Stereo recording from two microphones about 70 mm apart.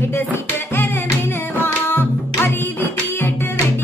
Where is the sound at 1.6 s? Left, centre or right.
Left.